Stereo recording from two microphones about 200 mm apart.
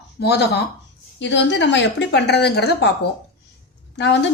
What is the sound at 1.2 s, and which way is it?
A woman's voice, 65° left (ahead or behind).